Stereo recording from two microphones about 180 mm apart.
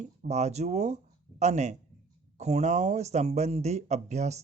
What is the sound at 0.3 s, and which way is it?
Speech, 40° right (ahead or behind).